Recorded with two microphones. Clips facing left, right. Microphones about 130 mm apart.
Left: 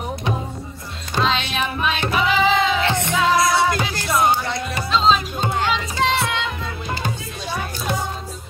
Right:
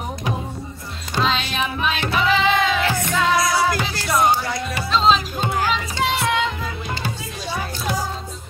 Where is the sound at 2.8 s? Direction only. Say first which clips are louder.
Left 1 dB; 25° left (ahead or behind).